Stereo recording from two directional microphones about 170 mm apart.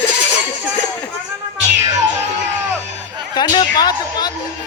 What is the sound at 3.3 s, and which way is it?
Speech, 25° left (ahead or behind).